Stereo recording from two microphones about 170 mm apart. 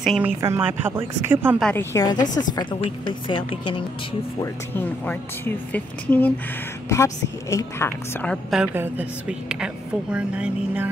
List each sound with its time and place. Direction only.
0.0 s speech: centre (ahead or behind)
0.4 s speech: 15° right (ahead or behind)
1.6 s a woman's voice: 5° left (ahead or behind)
2.1 s a woman's voice: 50° left (ahead or behind)
2.8 s a woman's voice: 30° left (ahead or behind)
4.4 s a woman's voice: 15° left (ahead or behind)
8.7 s speech: 15° right (ahead or behind)
10.1 s speech: 5° right (ahead or behind)